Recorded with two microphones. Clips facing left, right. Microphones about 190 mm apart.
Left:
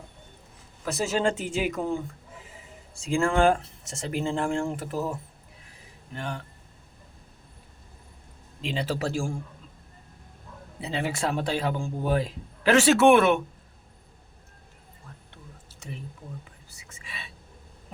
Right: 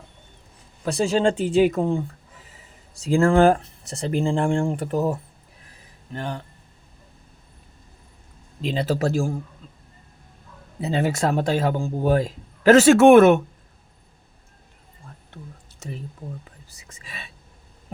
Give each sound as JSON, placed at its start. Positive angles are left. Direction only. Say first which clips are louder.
{"t": 0.9, "sound": "speech", "louder": "right 5 dB", "side_deg": -30}
{"t": 6.1, "sound": "speech", "louder": "right 4 dB", "side_deg": -35}
{"t": 8.6, "sound": "speech", "louder": "right 6 dB", "side_deg": -40}
{"t": 10.8, "sound": "speech", "louder": "right 7 dB", "side_deg": -45}
{"t": 16.4, "sound": "speech", "louder": "right 2 dB", "side_deg": -40}